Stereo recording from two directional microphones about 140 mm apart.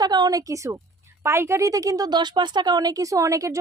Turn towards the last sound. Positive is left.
turn(degrees=-25)  # may be behind; listen again after turning